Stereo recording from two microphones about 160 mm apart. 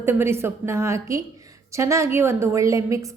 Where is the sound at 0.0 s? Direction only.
15° right (ahead or behind).